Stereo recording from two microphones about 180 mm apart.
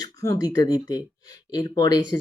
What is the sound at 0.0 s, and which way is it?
Speech, 20° left (ahead or behind).